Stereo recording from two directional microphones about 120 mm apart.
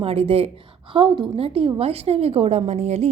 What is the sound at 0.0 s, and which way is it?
A woman's voice, 55° right (ahead or behind).